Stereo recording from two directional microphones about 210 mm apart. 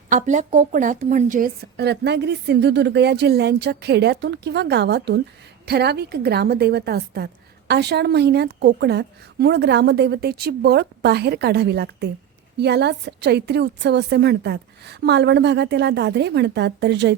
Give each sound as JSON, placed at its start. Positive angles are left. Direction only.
{"t": 0.1, "sound": "a woman's voice", "side_deg": -35}